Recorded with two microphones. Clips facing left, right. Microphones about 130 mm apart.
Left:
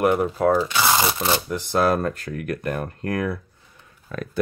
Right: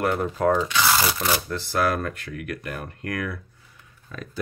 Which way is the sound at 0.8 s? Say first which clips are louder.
Left 2 dB; 20° left (ahead or behind).